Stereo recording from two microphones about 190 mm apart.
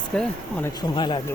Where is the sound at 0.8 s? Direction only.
25° left (ahead or behind).